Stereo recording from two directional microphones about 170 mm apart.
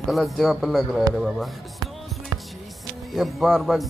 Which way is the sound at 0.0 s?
Centre (ahead or behind).